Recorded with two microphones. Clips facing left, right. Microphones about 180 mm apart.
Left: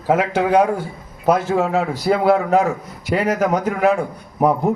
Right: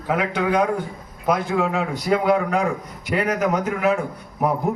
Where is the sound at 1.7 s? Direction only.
35° left (ahead or behind).